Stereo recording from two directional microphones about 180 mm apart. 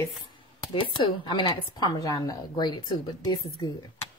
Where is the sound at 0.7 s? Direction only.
25° left (ahead or behind).